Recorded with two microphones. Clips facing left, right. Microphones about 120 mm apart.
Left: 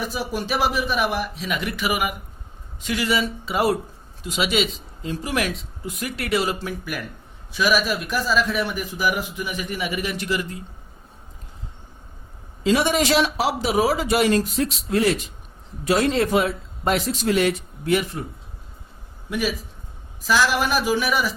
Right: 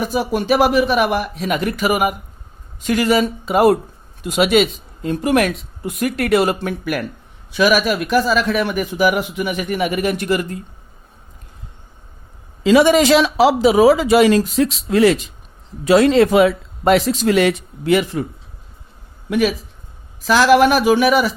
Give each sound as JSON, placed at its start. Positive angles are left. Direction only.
{"t": 0.0, "sound": "a man's voice", "side_deg": -55}
{"t": 12.6, "sound": "speech", "side_deg": -90}
{"t": 19.3, "sound": "a man's voice", "side_deg": -65}